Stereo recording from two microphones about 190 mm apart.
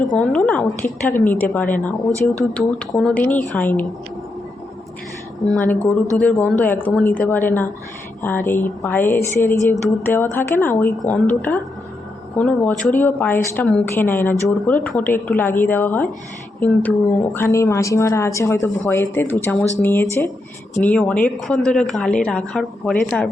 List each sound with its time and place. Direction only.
0.2 s a woman's voice: 5° left (ahead or behind)
5.5 s a woman's voice: 10° left (ahead or behind)